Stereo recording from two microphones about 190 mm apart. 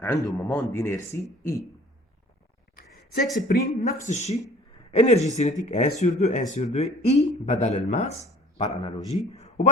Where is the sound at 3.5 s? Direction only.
40° left (ahead or behind).